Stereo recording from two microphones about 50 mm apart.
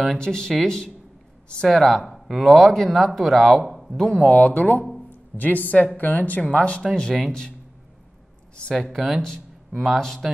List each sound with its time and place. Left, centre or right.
0.0 s speech: centre
4.3 s speech: left
6.9 s speech: centre
8.9 s speech: centre